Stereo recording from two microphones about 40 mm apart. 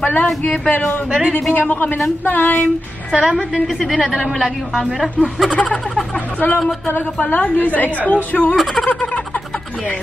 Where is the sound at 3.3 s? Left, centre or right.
Centre.